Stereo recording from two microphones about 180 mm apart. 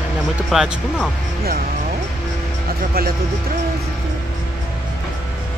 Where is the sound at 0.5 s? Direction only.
5° right (ahead or behind).